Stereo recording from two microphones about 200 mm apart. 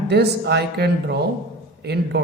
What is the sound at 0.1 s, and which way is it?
A man's voice, 55° right (ahead or behind).